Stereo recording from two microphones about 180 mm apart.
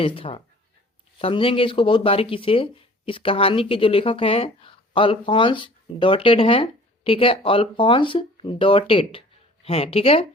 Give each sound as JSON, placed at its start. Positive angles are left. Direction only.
{"t": 0.0, "sound": "speech", "side_deg": 30}